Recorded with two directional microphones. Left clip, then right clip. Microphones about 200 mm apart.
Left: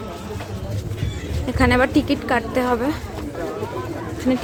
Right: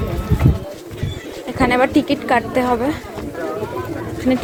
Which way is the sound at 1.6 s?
20° left (ahead or behind).